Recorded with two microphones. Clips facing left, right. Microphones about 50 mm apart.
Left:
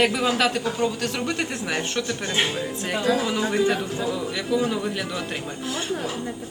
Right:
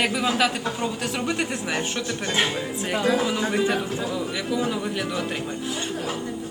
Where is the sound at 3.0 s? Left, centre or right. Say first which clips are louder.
Even; centre.